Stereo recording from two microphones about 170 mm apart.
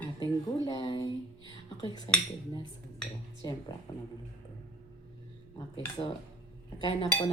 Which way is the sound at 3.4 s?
25° left (ahead or behind).